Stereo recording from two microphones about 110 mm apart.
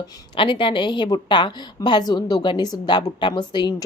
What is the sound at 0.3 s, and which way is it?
A woman's voice, 50° left (ahead or behind).